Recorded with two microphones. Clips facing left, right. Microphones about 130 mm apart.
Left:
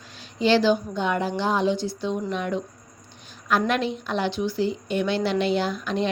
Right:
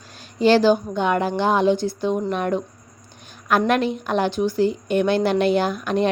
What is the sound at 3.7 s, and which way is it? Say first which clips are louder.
A woman's voice: right 5 dB; 50° right (ahead or behind).